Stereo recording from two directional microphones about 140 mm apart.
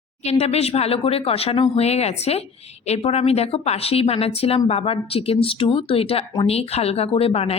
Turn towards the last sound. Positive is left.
turn(degrees=45)  # may be behind; listen again after turning